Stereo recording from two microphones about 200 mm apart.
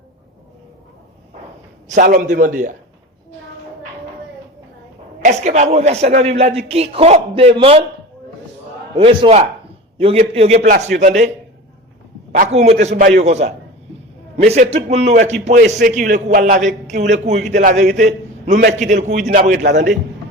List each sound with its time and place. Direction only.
1.9 s a man's voice: 40° right (ahead or behind)
5.2 s a man's voice: 35° right (ahead or behind)
9.0 s a man's voice: 30° right (ahead or behind)
12.5 s a man's voice: 30° right (ahead or behind)